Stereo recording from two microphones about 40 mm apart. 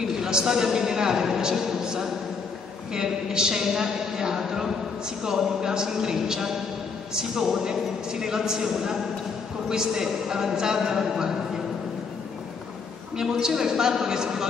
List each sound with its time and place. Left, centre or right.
0.0 s a man's voice: centre
13.2 s a man's voice: centre